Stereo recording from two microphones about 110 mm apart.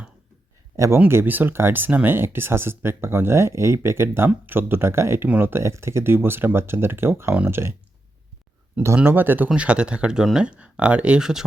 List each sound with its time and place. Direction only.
0.9 s speech: 20° right (ahead or behind)
9.0 s speech: 20° right (ahead or behind)